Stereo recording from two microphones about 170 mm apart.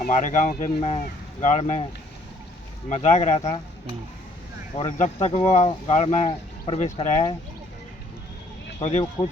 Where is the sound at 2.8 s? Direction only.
45° left (ahead or behind).